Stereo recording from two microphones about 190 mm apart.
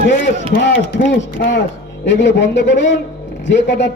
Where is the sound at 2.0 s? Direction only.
70° left (ahead or behind).